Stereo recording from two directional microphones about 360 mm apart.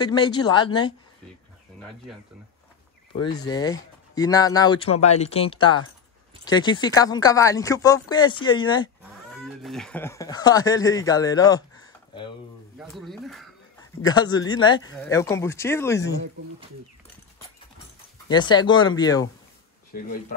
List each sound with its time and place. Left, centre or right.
0.0 s speech: centre
3.3 s speech: centre
9.6 s speech: centre
12.7 s speech: centre
14.0 s speech: centre
18.3 s speech: centre
19.9 s speech: left